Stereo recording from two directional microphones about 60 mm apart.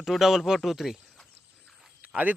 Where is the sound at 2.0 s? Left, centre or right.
Right.